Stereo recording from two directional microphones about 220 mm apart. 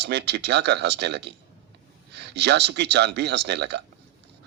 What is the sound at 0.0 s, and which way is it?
Speech, 50° right (ahead or behind).